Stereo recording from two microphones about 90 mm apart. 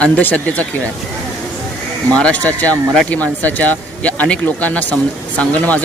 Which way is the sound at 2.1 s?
15° left (ahead or behind).